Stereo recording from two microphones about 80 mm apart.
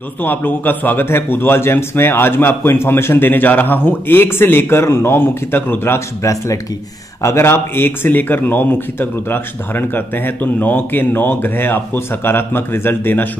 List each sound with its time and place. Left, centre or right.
0.2 s a man's voice: left